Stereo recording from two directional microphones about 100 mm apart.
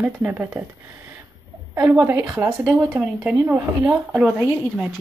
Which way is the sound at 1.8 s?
20° right (ahead or behind).